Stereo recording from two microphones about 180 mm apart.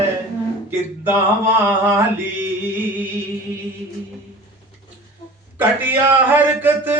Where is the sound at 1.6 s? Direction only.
10° right (ahead or behind).